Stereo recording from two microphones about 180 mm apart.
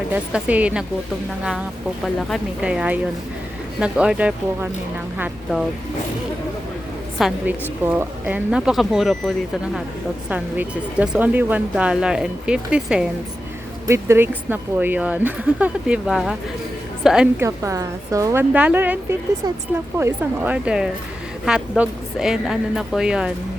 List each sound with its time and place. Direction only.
0.1 s speech: 10° right (ahead or behind)
2.1 s speech: centre (ahead or behind)
7.2 s a woman's voice: centre (ahead or behind)
17.4 s speech: 15° right (ahead or behind)
20.0 s speech: 10° right (ahead or behind)